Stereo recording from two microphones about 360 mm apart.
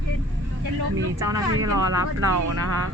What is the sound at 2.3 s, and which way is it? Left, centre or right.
Speech, right.